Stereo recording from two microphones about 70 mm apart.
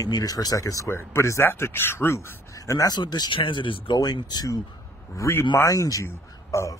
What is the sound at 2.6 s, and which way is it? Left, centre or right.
Speech, left.